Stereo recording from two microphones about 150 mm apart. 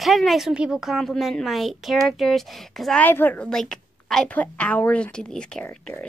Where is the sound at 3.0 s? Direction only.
10° left (ahead or behind).